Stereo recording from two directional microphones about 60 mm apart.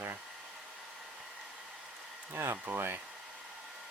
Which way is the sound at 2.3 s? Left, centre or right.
Right.